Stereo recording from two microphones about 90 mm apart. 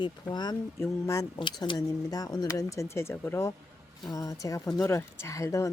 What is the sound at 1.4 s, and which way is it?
Speech, 65° left (ahead or behind).